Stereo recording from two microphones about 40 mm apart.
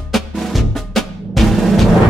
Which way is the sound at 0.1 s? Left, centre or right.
Centre.